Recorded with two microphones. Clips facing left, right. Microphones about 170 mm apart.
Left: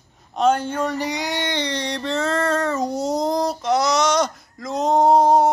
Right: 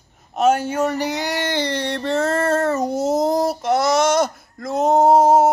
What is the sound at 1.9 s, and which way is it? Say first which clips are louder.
Speech: right 3 dB; 55° right (ahead or behind).